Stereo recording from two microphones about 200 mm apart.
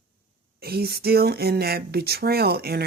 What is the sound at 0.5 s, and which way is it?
Speech, 50° right (ahead or behind).